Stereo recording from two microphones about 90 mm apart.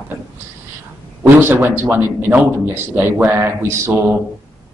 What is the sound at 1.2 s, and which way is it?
A man's voice, 25° right (ahead or behind).